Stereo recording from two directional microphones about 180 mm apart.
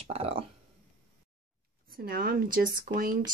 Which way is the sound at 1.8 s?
55° right (ahead or behind).